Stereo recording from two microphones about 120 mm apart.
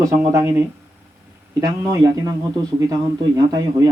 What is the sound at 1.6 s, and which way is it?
A man's voice, 30° right (ahead or behind).